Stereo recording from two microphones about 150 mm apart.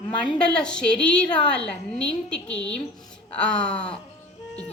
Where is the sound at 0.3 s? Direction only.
5° left (ahead or behind).